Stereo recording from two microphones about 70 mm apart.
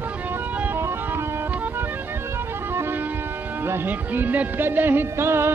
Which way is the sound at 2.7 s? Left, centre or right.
Right.